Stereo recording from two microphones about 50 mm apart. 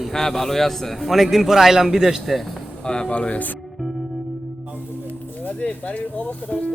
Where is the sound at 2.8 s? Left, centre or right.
Centre.